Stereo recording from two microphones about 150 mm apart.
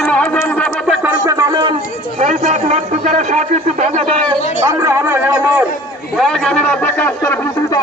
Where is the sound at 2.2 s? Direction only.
50° right (ahead or behind).